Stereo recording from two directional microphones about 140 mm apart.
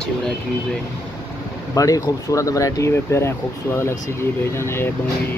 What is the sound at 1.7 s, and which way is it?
Speech, 25° left (ahead or behind).